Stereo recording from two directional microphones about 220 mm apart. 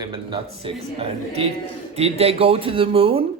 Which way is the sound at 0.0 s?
25° right (ahead or behind).